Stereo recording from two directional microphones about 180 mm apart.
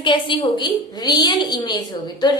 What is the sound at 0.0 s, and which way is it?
A woman's voice, 25° left (ahead or behind).